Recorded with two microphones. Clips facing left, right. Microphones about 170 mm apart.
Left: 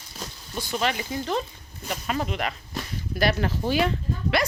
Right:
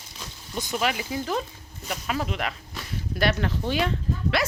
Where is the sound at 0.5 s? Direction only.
15° right (ahead or behind).